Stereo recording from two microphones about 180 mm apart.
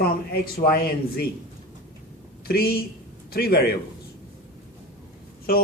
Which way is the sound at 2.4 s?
60° left (ahead or behind).